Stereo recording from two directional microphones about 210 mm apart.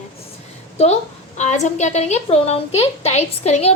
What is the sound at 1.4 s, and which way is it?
A woman's voice, 35° left (ahead or behind).